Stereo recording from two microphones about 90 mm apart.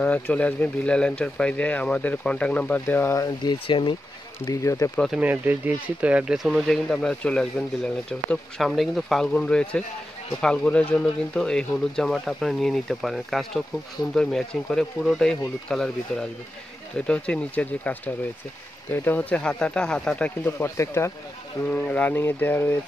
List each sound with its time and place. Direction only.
0.0 s speech: 15° left (ahead or behind)
3.2 s speech: 45° left (ahead or behind)
3.6 s speech: 65° left (ahead or behind)
4.5 s speech: 35° left (ahead or behind)
5.2 s speech: 20° right (ahead or behind)
6.6 s speech: 5° left (ahead or behind)
20.4 s speech: 30° left (ahead or behind)
21.6 s speech: 20° left (ahead or behind)